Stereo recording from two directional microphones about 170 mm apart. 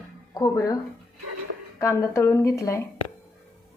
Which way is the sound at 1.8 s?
15° left (ahead or behind).